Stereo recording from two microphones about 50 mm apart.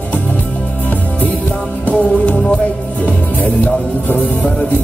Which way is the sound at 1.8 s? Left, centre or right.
Left.